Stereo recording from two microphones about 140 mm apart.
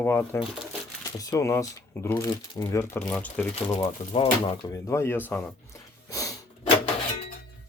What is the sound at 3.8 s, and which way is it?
Speech, 35° left (ahead or behind).